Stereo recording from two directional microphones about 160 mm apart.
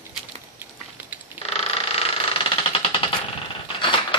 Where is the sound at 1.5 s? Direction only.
40° left (ahead or behind).